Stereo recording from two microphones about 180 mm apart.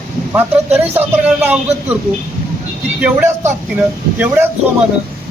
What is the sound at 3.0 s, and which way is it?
Speech, 10° right (ahead or behind).